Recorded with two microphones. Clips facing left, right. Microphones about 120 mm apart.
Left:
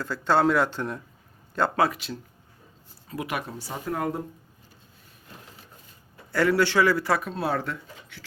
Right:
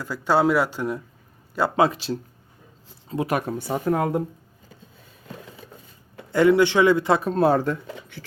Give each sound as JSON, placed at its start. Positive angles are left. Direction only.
{"t": 0.0, "sound": "speech", "side_deg": -10}
{"t": 1.8, "sound": "a man's voice", "side_deg": -30}
{"t": 3.2, "sound": "speech", "side_deg": -50}
{"t": 6.3, "sound": "a man's voice", "side_deg": -20}
{"t": 7.3, "sound": "speech", "side_deg": -40}
{"t": 7.9, "sound": "a sound", "side_deg": -70}